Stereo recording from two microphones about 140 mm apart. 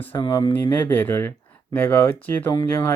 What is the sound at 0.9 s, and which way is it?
Speech, 15° left (ahead or behind).